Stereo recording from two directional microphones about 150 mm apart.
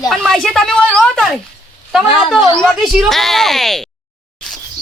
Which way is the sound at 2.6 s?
Centre (ahead or behind).